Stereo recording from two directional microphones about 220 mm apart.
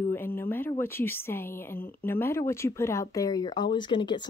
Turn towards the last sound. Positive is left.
turn(degrees=20)  # may be behind; listen again after turning